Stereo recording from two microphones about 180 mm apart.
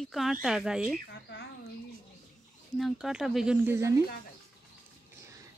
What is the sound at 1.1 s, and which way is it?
Speech, 70° left (ahead or behind).